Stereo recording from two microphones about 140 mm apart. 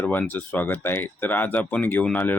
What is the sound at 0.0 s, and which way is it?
Speech, 10° left (ahead or behind).